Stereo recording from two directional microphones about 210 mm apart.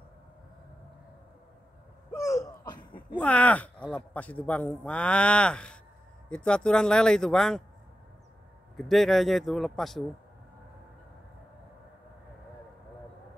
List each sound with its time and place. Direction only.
2.1 s a sound: 15° left (ahead or behind)
3.2 s a man's voice: 5° left (ahead or behind)
8.7 s speech: centre (ahead or behind)